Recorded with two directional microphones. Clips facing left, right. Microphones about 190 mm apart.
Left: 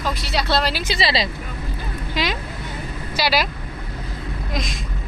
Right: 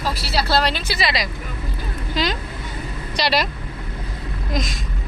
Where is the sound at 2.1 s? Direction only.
5° left (ahead or behind).